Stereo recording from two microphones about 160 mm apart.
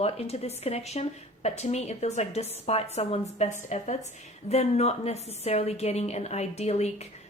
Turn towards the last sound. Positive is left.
turn(degrees=45)  # may be behind; listen again after turning